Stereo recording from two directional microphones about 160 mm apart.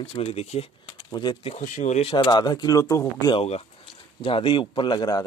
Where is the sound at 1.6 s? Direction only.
50° left (ahead or behind).